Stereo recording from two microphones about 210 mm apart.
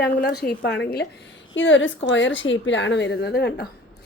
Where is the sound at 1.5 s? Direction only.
60° left (ahead or behind).